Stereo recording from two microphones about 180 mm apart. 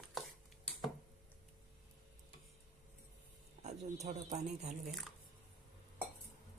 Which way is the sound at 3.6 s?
40° right (ahead or behind).